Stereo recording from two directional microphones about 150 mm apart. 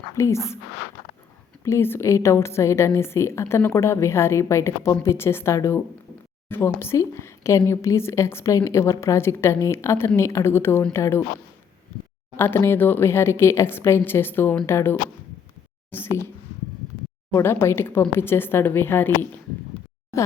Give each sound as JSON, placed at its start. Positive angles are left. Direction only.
{"t": 0.2, "sound": "a woman's voice", "side_deg": 20}
{"t": 1.6, "sound": "a woman's voice", "side_deg": 15}
{"t": 12.4, "sound": "a woman's voice", "side_deg": 15}
{"t": 17.3, "sound": "a woman's voice", "side_deg": 15}